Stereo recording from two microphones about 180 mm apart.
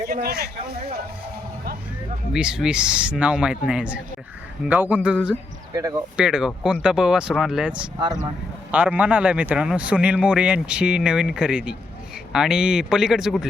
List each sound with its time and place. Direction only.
0.1 s speech: 55° right (ahead or behind)
2.3 s a man's voice: 5° right (ahead or behind)